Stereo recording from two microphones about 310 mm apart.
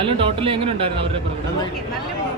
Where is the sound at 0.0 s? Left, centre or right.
Centre.